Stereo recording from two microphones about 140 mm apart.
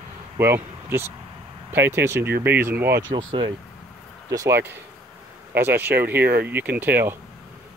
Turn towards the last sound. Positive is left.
turn(degrees=-15)  # may be behind; listen again after turning